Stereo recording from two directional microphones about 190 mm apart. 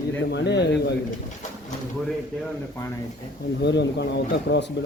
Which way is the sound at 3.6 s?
65° left (ahead or behind).